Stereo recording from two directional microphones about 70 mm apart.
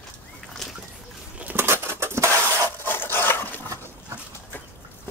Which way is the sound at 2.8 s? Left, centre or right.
Left.